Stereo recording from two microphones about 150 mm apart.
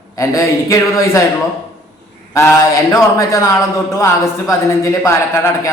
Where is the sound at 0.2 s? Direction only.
20° left (ahead or behind).